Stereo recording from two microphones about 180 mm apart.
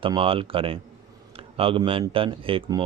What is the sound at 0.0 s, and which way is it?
Speech, 30° right (ahead or behind).